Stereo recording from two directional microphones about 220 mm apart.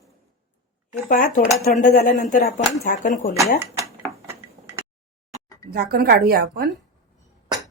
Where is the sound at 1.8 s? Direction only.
35° left (ahead or behind).